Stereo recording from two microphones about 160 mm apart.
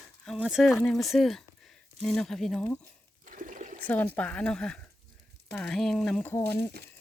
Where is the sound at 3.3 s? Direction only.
55° right (ahead or behind).